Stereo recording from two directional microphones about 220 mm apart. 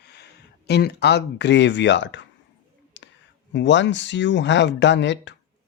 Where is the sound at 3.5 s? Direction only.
55° left (ahead or behind).